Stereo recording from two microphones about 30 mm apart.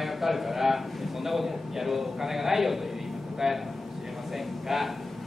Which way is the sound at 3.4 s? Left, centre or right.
Centre.